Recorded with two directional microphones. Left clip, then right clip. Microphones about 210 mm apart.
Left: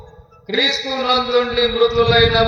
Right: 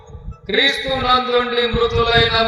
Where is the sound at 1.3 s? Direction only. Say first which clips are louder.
Left 1 dB; 35° right (ahead or behind).